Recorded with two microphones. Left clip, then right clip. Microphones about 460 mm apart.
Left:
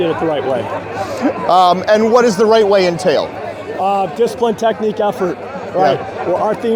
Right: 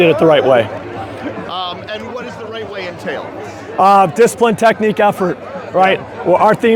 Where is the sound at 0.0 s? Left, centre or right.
Right.